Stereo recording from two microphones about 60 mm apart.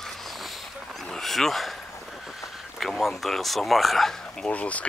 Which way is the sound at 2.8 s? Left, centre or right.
Centre.